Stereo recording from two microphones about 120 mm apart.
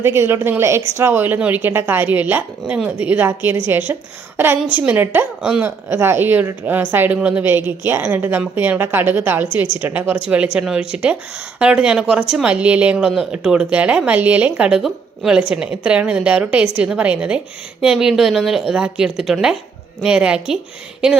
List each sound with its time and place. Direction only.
0.0 s a woman's voice: 20° right (ahead or behind)